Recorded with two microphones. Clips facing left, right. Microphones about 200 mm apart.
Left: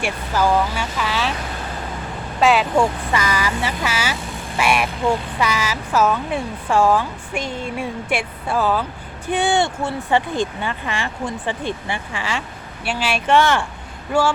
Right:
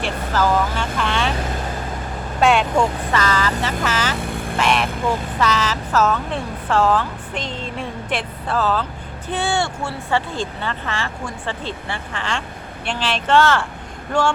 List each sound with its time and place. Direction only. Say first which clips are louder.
0.0 s speech: even; 10° left (ahead or behind)
2.4 s speech: even; centre (ahead or behind)
4.2 s vehicle: right 5 dB; 60° right (ahead or behind)
4.5 s speech: left 1 dB; 10° left (ahead or behind)